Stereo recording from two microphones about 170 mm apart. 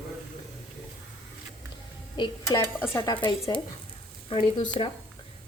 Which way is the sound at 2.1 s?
25° left (ahead or behind).